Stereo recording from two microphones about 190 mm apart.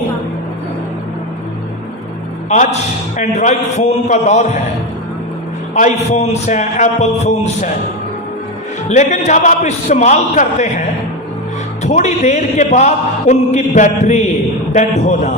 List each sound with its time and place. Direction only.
2.5 s speech: 35° left (ahead or behind)
5.7 s speech: 40° left (ahead or behind)
8.9 s speech: 40° left (ahead or behind)